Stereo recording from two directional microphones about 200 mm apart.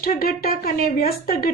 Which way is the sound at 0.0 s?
45° left (ahead or behind).